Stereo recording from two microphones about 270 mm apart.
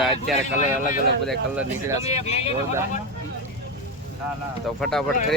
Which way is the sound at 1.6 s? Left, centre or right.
Centre.